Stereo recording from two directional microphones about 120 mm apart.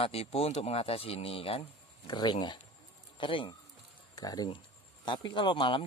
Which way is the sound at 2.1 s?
40° left (ahead or behind).